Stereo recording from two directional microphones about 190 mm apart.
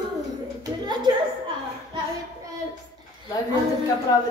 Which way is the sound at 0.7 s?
25° right (ahead or behind).